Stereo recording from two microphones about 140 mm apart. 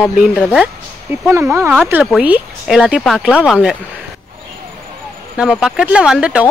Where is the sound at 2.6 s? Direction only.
Centre (ahead or behind).